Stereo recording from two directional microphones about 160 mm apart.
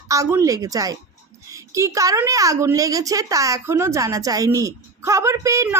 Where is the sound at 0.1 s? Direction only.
20° right (ahead or behind).